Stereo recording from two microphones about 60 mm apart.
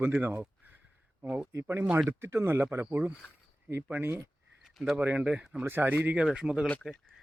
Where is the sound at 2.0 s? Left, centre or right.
Right.